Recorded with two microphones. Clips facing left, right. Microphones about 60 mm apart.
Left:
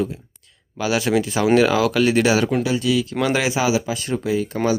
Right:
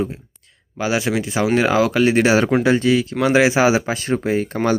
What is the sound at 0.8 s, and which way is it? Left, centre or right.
Speech, right.